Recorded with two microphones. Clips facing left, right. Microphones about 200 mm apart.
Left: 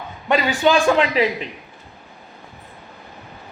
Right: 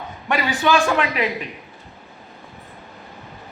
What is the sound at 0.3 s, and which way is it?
Speech, 25° left (ahead or behind).